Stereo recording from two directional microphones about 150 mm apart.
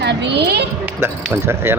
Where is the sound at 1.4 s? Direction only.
15° right (ahead or behind).